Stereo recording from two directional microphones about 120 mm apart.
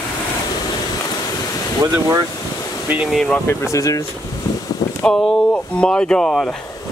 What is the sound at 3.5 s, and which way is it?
Speech, 25° left (ahead or behind).